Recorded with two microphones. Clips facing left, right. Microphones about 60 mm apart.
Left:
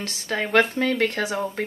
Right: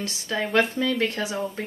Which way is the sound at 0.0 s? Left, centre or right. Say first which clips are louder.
Left 1 dB; left.